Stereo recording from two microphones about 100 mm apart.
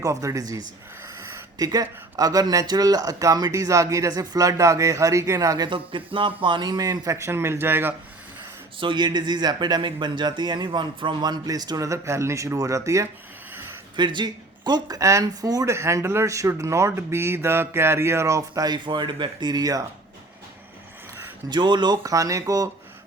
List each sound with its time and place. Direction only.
0.0 s speech: 35° right (ahead or behind)
5.6 s speech: 55° right (ahead or behind); by 7.9 s 20° right (ahead or behind)
8.8 s speech: 50° right (ahead or behind); by 13.1 s 30° right (ahead or behind)
13.9 s speech: 50° right (ahead or behind)
15.7 s speech: 30° right (ahead or behind)
21.5 s speech: 50° right (ahead or behind)
22.0 s speech: 35° right (ahead or behind)